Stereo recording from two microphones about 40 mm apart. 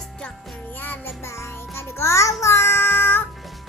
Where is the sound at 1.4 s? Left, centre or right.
Left.